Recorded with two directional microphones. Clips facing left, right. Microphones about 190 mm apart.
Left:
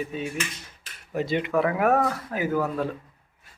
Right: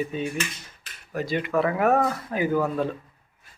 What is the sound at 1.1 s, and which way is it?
Speech, 25° left (ahead or behind).